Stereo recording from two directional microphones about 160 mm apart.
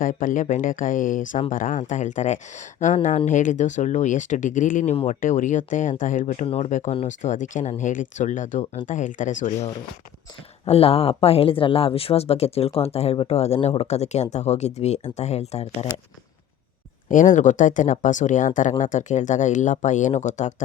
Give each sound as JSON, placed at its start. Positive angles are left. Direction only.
{"t": 0.0, "sound": "speech", "side_deg": 55}
{"t": 6.4, "sound": "speech", "side_deg": 40}
{"t": 6.7, "sound": "speech", "side_deg": 50}
{"t": 10.7, "sound": "speech", "side_deg": 40}
{"t": 17.1, "sound": "speech", "side_deg": 50}